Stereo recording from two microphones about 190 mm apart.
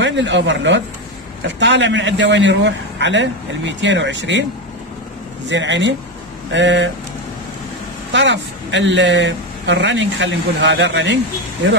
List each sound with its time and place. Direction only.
0.0 s speech: 70° right (ahead or behind)
5.5 s speech: 70° right (ahead or behind)
8.1 s speech: 70° right (ahead or behind)